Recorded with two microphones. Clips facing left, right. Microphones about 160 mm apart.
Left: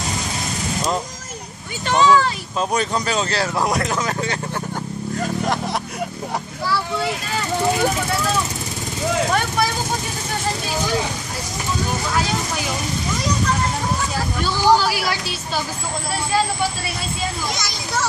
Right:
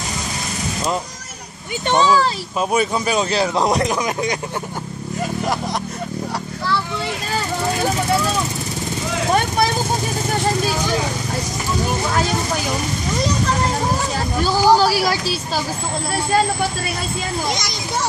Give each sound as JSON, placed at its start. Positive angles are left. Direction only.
{"t": 1.9, "sound": "speech", "side_deg": -30}
{"t": 2.7, "sound": "speech", "side_deg": -10}
{"t": 14.4, "sound": "speech", "side_deg": -40}